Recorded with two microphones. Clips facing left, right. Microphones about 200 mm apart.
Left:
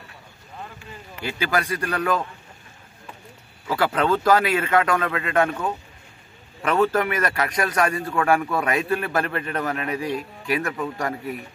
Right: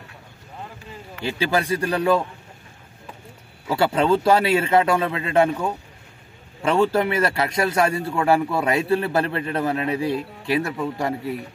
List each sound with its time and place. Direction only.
1.2 s a man's voice: 30° right (ahead or behind)
3.7 s a man's voice: 30° right (ahead or behind)
6.6 s a man's voice: 30° right (ahead or behind)